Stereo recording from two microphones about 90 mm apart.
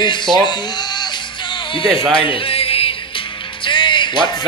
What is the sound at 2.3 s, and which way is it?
Music, 90° left.